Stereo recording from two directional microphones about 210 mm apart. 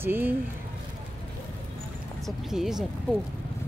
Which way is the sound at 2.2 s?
Centre (ahead or behind).